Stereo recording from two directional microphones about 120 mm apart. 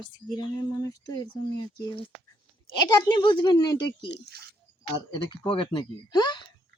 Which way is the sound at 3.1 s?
40° left (ahead or behind).